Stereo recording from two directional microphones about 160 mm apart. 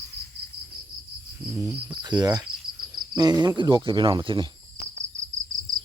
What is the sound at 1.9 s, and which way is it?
Speech, 25° right (ahead or behind).